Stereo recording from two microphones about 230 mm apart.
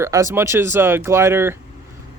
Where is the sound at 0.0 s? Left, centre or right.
Centre.